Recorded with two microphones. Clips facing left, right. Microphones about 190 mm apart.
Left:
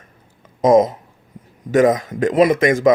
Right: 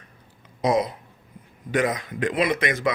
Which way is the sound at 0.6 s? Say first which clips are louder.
Left 9 dB; 45° left (ahead or behind).